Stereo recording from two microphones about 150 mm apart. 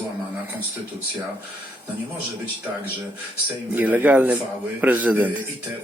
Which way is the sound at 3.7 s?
10° right (ahead or behind).